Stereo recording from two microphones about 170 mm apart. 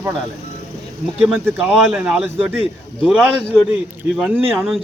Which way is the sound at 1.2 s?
5° right (ahead or behind).